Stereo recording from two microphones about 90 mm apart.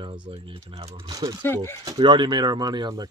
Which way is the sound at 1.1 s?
45° right (ahead or behind).